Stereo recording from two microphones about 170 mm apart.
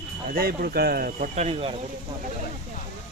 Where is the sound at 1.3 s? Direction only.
35° right (ahead or behind).